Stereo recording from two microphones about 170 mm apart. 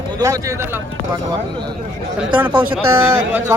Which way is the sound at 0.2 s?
20° right (ahead or behind).